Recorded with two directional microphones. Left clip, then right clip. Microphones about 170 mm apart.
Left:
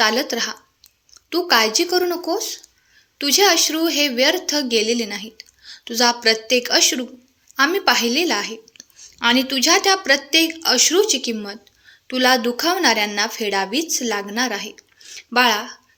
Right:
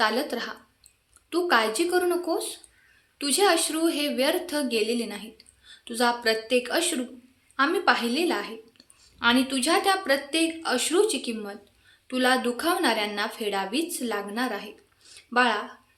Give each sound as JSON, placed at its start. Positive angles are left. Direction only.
{"t": 0.0, "sound": "a woman's voice", "side_deg": 30}